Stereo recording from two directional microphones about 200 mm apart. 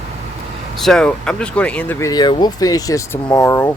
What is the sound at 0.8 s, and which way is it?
Speech, centre (ahead or behind).